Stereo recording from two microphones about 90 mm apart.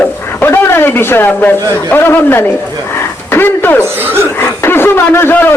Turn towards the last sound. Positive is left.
turn(degrees=25)  # may be behind; listen again after turning